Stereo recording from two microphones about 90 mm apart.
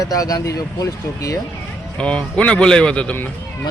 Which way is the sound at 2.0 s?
10° left (ahead or behind).